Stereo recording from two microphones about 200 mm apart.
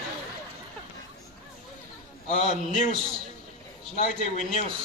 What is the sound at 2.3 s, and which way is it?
Speech, 35° left (ahead or behind).